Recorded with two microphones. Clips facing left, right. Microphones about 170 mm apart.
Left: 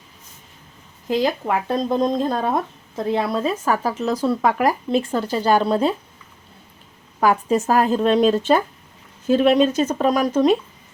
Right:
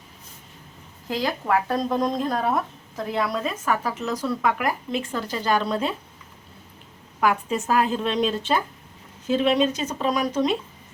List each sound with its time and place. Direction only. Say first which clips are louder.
1.0 s speech: left 5 dB; 20° left (ahead or behind)
7.2 s speech: left 5 dB; 40° left (ahead or behind)